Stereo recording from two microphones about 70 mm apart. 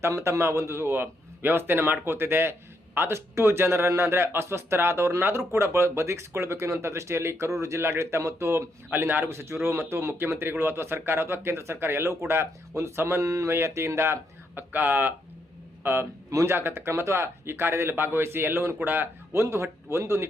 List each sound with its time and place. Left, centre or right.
0.0 s speech: right
14.7 s speech: right
16.3 s speech: right
16.6 s speech: right